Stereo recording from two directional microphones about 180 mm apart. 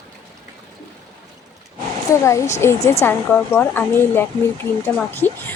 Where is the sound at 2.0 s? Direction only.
15° left (ahead or behind).